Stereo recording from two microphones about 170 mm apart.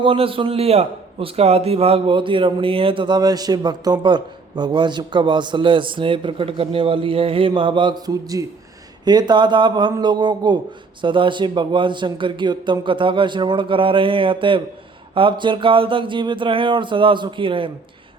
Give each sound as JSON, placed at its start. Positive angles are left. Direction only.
{"t": 0.0, "sound": "a man's voice", "side_deg": -30}